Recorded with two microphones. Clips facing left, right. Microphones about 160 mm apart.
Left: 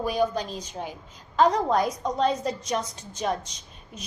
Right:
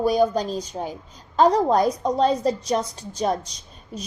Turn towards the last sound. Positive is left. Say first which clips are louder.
# right 8 dB
turn(degrees=-35)  # may be behind; listen again after turning